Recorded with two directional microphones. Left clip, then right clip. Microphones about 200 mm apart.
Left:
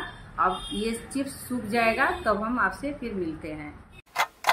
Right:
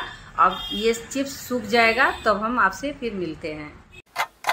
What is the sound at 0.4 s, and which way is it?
A woman's voice, 45° right (ahead or behind).